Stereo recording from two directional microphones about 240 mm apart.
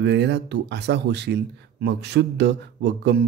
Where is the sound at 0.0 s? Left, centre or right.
Right.